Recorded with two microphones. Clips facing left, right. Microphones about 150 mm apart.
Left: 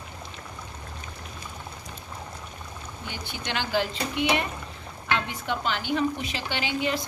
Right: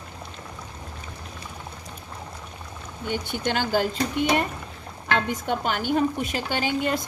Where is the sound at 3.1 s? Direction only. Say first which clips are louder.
Right 8 dB; 50° right (ahead or behind).